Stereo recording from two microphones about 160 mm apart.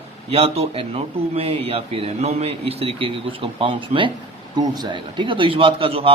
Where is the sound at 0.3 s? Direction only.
40° right (ahead or behind).